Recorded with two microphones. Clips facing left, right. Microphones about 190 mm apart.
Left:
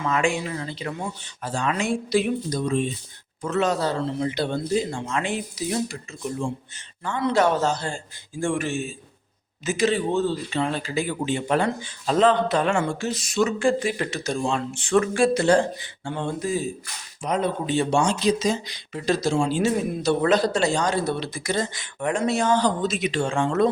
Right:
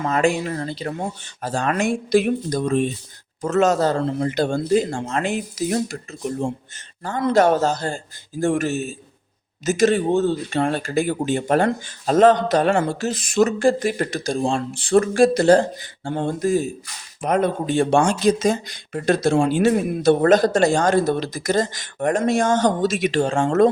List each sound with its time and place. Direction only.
0.0 s speech: 40° right (ahead or behind)
14.3 s speech: 35° right (ahead or behind)